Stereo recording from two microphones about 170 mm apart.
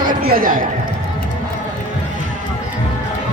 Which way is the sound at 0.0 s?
55° right (ahead or behind).